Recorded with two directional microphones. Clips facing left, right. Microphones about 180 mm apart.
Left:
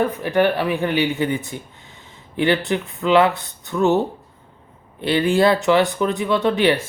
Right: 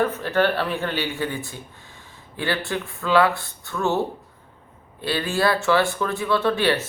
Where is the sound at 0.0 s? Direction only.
15° left (ahead or behind).